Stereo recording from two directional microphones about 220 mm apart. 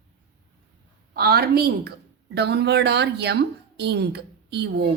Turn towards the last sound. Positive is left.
turn(degrees=-50)  # may be behind; listen again after turning